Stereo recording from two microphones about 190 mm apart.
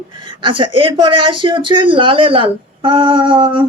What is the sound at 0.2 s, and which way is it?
Speech, 25° right (ahead or behind).